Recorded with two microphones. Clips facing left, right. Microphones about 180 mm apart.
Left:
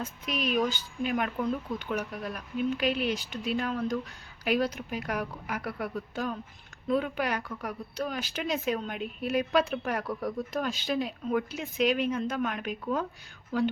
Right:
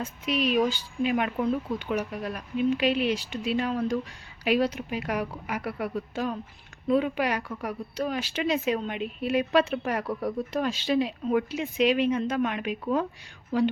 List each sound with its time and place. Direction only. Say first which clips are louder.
0.3 s speech: right 4 dB; 30° right (ahead or behind)
1.0 s speech: right 3 dB; 5° right (ahead or behind)